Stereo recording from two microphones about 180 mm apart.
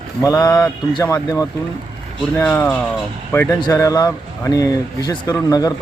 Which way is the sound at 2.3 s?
10° left (ahead or behind).